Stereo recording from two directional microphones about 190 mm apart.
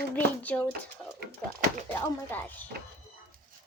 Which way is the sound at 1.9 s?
10° left (ahead or behind).